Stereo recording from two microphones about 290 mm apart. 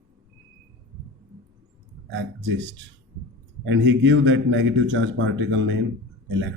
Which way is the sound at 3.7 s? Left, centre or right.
Right.